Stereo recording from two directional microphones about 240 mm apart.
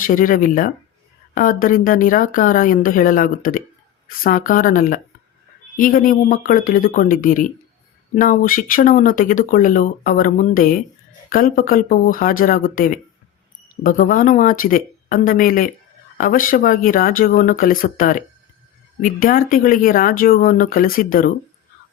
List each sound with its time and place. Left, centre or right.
0.0 s speech: left